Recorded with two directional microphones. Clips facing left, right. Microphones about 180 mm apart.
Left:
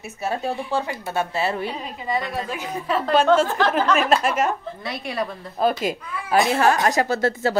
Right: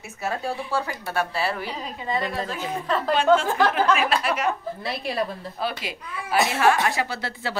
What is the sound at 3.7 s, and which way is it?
Speech, 45° left (ahead or behind).